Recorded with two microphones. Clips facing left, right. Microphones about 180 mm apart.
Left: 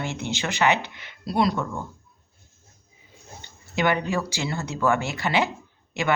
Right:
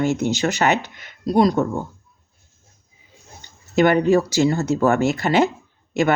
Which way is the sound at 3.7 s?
45° right (ahead or behind).